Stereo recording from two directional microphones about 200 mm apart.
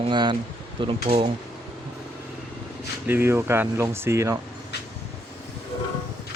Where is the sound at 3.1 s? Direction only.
10° right (ahead or behind).